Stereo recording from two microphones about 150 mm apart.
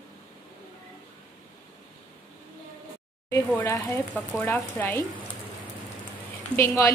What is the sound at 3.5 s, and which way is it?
Speech, 25° left (ahead or behind).